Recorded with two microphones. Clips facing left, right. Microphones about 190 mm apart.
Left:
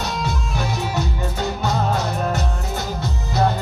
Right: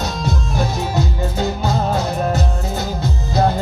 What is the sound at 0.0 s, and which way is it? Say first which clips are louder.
Music: right 2 dB; 40° right (ahead or behind).